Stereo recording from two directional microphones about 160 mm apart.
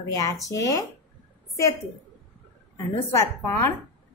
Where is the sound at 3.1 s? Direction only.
15° left (ahead or behind).